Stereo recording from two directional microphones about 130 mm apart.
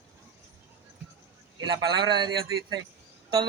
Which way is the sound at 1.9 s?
35° right (ahead or behind).